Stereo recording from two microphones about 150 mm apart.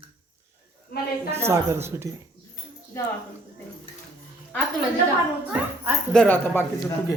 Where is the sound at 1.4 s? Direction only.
15° right (ahead or behind).